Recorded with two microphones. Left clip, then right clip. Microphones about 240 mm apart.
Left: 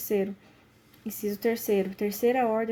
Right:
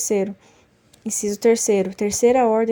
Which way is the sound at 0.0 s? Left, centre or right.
Right.